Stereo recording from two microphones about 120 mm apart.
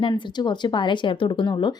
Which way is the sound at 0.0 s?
35° left (ahead or behind).